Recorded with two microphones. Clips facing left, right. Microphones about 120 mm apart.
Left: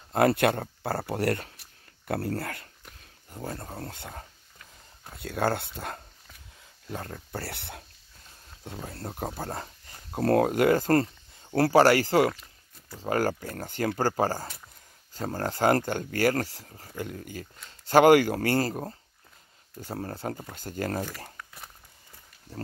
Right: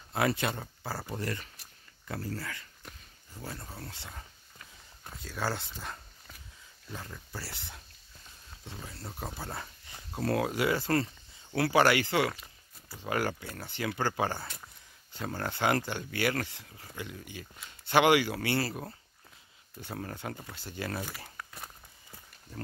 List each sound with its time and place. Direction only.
0.1 s speech: 55° left (ahead or behind)
5.2 s speech: 60° left (ahead or behind)
8.8 s speech: 55° left (ahead or behind)
21.4 s a sound: 10° right (ahead or behind)